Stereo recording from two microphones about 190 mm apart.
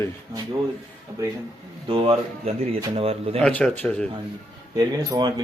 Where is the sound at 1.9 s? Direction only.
30° right (ahead or behind).